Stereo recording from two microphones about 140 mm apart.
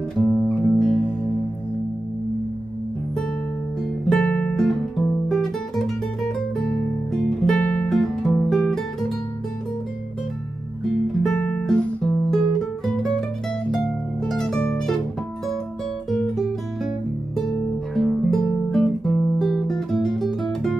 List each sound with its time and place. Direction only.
0.2 s music: 10° left (ahead or behind)
4.1 s guitar: 10° left (ahead or behind)
11.2 s music: 5° left (ahead or behind)
14.2 s music: 5° left (ahead or behind)
16.1 s music: 5° left (ahead or behind)
17.5 s guitar: 5° left (ahead or behind)